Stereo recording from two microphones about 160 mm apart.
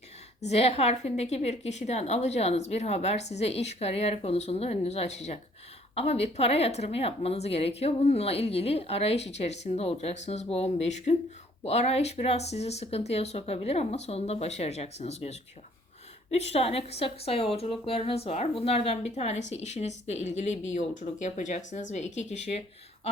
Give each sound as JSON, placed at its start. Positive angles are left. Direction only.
{"t": 0.4, "sound": "a woman's voice", "side_deg": 40}